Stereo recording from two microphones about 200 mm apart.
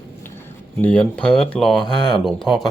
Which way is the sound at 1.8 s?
20° left (ahead or behind).